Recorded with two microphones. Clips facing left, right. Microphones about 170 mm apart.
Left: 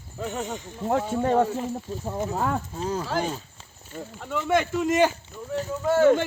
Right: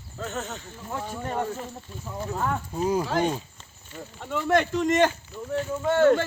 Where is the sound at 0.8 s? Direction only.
75° left (ahead or behind).